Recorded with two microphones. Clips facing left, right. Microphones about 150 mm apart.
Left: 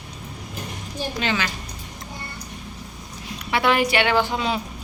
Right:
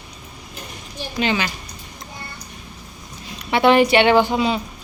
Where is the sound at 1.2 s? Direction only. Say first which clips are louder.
Right 5 dB; 15° right (ahead or behind).